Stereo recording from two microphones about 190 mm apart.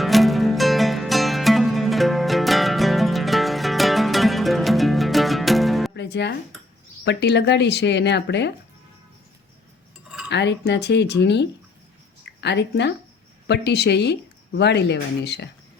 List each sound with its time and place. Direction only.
0.0 s music: centre (ahead or behind)
5.9 s music: 65° left (ahead or behind)
7.0 s speech: 65° left (ahead or behind)
10.2 s a woman's voice: 65° left (ahead or behind)